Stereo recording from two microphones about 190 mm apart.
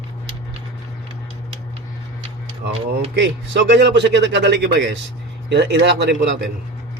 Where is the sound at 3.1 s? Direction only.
65° right (ahead or behind).